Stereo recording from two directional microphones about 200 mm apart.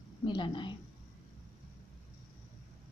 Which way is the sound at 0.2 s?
25° left (ahead or behind).